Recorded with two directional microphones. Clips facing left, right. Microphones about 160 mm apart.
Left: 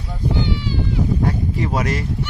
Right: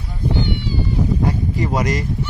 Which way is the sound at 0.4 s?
90° left.